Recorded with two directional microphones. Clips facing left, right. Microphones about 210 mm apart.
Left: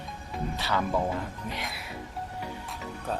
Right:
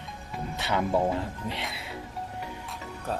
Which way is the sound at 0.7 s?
20° right (ahead or behind).